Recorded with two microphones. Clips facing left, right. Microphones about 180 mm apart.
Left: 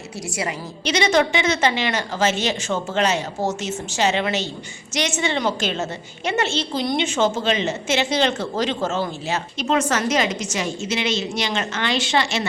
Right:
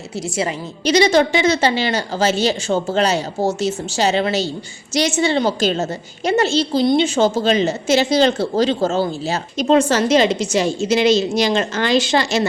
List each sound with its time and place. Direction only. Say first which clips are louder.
0.9 s a woman's voice: right 5 dB; 35° right (ahead or behind)